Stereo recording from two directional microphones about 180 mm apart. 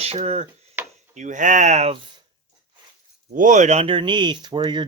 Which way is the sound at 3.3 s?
45° right (ahead or behind).